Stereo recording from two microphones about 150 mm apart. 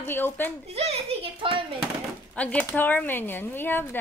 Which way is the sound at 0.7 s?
45° right (ahead or behind).